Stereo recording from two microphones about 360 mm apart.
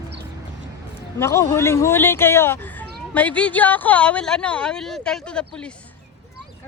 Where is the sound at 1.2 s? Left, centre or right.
Centre.